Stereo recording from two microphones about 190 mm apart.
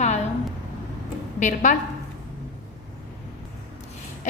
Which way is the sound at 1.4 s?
40° left (ahead or behind).